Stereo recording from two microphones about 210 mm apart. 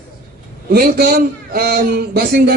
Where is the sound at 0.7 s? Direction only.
45° right (ahead or behind).